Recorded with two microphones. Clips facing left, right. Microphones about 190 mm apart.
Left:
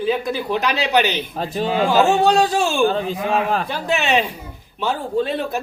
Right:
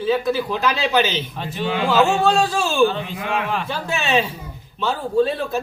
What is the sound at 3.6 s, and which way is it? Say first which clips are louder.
Speech: left 3 dB; 15° left (ahead or behind).